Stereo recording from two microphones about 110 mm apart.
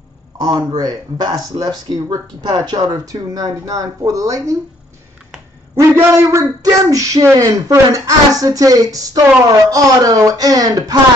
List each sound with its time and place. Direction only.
0.6 s speech: 35° right (ahead or behind)
5.8 s speech: 30° right (ahead or behind)